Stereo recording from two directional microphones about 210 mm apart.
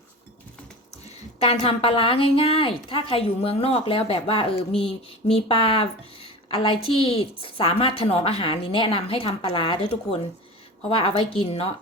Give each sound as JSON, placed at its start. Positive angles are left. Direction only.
{"t": 1.4, "sound": "a woman's voice", "side_deg": 25}